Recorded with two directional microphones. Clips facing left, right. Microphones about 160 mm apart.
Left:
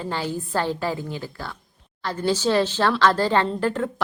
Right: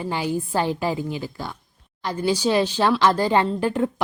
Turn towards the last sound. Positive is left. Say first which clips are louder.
# right 2 dB
turn(degrees=-15)  # may be behind; listen again after turning